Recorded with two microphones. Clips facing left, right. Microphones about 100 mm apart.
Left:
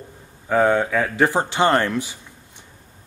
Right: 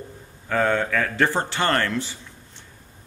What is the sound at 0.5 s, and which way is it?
Speech, 15° left (ahead or behind).